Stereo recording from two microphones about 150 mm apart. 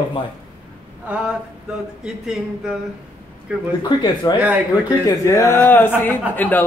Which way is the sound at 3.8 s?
30° left (ahead or behind).